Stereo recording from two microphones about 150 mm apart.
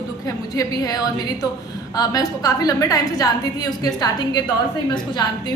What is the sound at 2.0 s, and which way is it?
A woman's voice, 25° left (ahead or behind).